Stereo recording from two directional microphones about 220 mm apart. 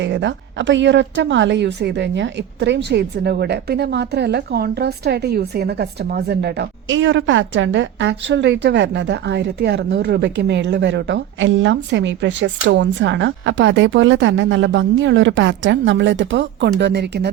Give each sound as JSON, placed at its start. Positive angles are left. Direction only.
{"t": 0.0, "sound": "a woman's voice", "side_deg": -55}